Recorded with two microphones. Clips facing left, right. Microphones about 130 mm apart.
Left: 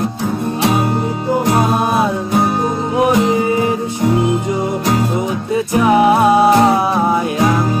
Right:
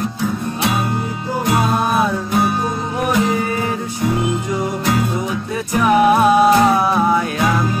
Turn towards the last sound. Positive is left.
turn(degrees=25)  # may be behind; listen again after turning